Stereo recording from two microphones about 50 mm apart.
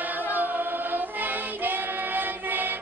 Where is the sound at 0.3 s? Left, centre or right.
Right.